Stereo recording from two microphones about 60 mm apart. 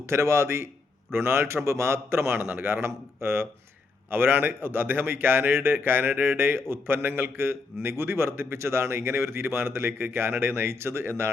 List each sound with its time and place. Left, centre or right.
0.0 s a man's voice: right